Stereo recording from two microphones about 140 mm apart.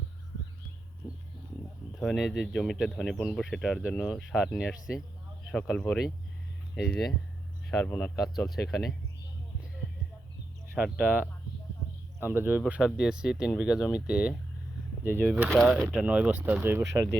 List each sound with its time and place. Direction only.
2.0 s speech: centre (ahead or behind)
6.8 s speech: 5° left (ahead or behind)
8.2 s speech: centre (ahead or behind)
10.8 s speech: 5° right (ahead or behind)
15.1 s speech: 10° left (ahead or behind)
15.4 s speech: centre (ahead or behind); by 17.1 s 20° right (ahead or behind)